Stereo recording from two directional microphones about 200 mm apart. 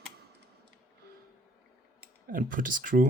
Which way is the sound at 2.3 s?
40° right (ahead or behind).